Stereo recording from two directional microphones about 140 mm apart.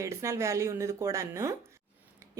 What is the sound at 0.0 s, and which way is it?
Speech, 20° right (ahead or behind).